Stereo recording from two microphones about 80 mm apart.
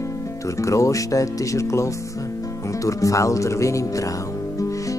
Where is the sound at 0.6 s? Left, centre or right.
Left.